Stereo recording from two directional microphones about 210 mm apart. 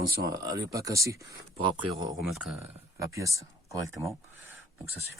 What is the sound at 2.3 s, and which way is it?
Speech, 10° right (ahead or behind).